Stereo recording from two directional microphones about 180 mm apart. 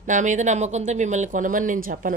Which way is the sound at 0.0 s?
45° right (ahead or behind).